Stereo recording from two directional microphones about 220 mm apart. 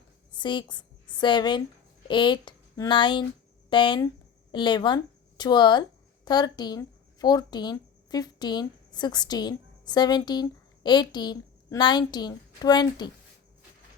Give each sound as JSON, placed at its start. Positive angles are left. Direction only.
{"t": 0.3, "sound": "a woman's voice", "side_deg": 20}